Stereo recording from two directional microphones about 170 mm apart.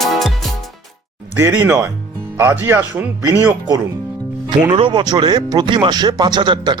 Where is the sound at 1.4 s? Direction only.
15° right (ahead or behind).